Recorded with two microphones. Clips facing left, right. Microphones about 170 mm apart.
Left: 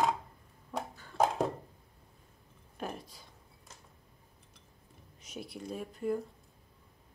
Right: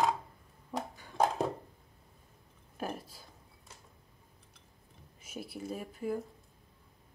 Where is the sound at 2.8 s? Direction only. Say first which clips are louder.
Right 1 dB; 5° right (ahead or behind).